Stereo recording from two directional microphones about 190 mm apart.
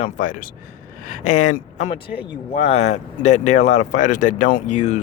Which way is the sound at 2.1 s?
5° right (ahead or behind).